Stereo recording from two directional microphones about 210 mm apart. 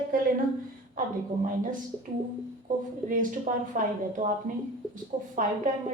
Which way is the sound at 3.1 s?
40° right (ahead or behind).